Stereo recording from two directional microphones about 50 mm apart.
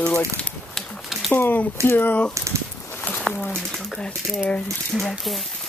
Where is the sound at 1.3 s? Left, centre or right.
Left.